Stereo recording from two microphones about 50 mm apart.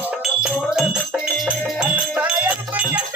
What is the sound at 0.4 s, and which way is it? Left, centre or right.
Jingle bell, centre.